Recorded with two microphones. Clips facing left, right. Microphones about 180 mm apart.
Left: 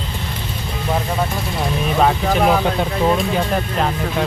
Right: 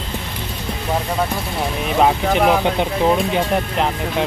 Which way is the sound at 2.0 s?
15° right (ahead or behind).